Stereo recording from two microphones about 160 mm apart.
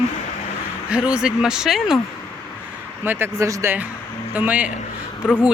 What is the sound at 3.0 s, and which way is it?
Speech, 15° right (ahead or behind).